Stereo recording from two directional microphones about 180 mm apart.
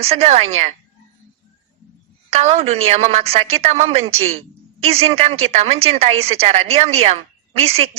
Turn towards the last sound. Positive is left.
turn(degrees=-35)  # may be behind; listen again after turning